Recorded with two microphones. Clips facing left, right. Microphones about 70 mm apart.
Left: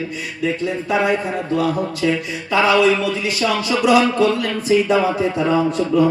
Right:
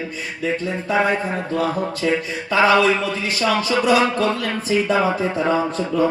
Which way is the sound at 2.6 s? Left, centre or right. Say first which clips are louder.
Left 1 dB; right.